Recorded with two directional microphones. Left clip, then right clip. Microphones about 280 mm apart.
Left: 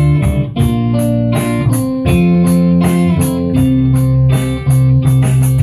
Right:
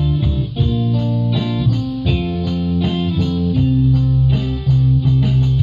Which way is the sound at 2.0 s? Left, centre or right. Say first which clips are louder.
Left 9 dB; left.